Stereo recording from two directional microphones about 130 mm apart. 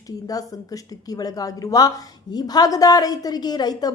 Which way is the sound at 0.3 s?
30° left (ahead or behind).